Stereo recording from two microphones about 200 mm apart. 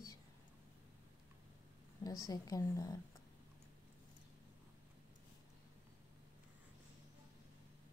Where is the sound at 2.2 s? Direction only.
15° left (ahead or behind).